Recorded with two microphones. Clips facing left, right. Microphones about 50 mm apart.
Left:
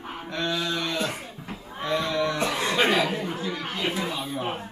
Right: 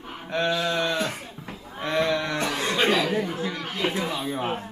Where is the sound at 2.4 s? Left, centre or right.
Centre.